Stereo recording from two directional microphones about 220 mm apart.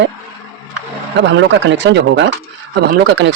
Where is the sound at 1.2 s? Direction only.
55° right (ahead or behind).